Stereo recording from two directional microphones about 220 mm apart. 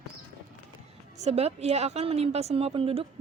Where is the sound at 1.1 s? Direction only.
30° right (ahead or behind).